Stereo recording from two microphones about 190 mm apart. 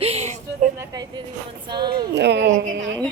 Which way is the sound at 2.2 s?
65° right (ahead or behind).